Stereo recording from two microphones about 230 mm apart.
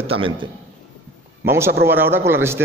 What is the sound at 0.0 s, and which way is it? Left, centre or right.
Speech, right.